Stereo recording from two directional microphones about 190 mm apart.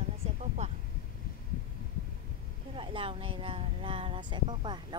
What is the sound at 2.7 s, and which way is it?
Speech, 25° right (ahead or behind).